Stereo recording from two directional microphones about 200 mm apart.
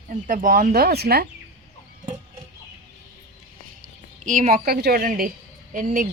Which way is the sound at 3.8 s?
40° right (ahead or behind).